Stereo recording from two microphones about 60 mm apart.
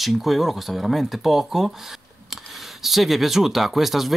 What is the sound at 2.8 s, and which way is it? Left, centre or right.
Speech, centre.